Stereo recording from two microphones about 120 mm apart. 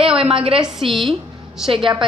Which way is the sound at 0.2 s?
50° right (ahead or behind).